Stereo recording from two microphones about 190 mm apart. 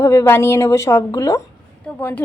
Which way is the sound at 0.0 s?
15° left (ahead or behind).